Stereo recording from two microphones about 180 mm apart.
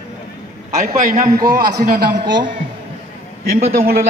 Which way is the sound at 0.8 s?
50° right (ahead or behind).